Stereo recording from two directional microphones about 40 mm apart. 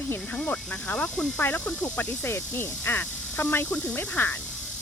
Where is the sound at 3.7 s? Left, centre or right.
Left.